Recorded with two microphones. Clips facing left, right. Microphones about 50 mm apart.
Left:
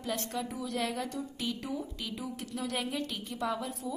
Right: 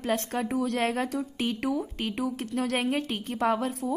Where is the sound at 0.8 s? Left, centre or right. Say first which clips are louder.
Right 7 dB; right.